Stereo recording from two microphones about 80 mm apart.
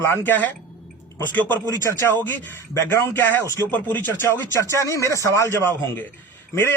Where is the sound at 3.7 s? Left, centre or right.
Left.